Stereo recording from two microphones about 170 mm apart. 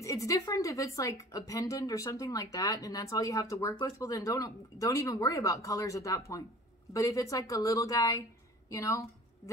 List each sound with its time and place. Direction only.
0.0 s a woman's voice: 20° left (ahead or behind)